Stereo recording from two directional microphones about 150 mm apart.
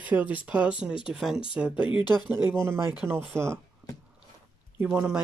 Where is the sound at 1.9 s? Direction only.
30° left (ahead or behind).